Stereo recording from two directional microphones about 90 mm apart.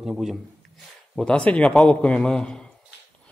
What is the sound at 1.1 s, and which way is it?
A man's voice, 10° left (ahead or behind).